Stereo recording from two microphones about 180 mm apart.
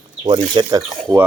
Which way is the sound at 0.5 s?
20° right (ahead or behind).